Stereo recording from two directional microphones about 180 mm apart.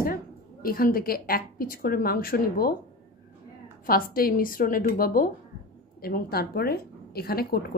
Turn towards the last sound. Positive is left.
turn(degrees=55)  # may be behind; listen again after turning